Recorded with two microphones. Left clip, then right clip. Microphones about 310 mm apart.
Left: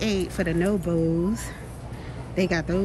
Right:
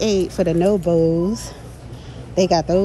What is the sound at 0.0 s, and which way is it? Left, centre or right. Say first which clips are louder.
Speech: right 8 dB; centre.